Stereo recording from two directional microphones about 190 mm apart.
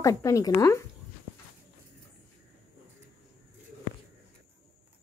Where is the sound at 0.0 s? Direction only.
15° left (ahead or behind).